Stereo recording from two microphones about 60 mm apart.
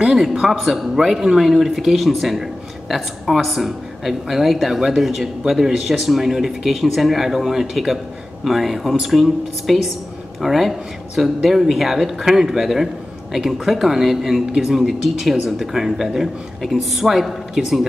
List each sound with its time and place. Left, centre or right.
0.0 s speech: centre